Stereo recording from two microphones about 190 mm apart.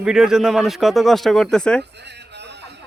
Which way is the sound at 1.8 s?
65° right (ahead or behind).